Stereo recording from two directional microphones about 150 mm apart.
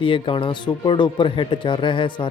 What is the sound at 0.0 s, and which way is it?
Speech, 35° left (ahead or behind).